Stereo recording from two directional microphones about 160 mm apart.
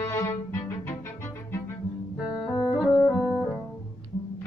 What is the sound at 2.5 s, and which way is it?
Music, 20° left (ahead or behind).